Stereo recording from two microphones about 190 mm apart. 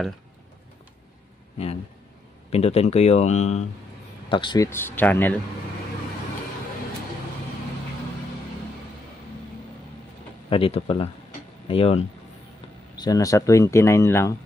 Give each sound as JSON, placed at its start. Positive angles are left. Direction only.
{"t": 2.5, "sound": "speech", "side_deg": 35}
{"t": 4.3, "sound": "speech", "side_deg": 25}
{"t": 10.5, "sound": "speech", "side_deg": 30}
{"t": 13.0, "sound": "speech", "side_deg": 20}